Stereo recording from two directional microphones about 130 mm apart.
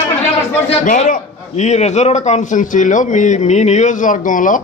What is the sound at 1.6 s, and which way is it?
A man's voice, 60° left (ahead or behind).